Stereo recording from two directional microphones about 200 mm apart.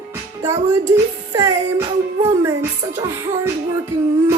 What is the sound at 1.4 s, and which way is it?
Speech, 20° right (ahead or behind).